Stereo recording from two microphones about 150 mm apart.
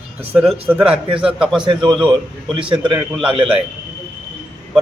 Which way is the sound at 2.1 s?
35° right (ahead or behind).